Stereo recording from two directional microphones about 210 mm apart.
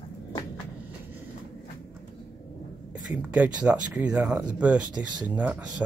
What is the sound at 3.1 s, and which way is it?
Speech, 5° right (ahead or behind).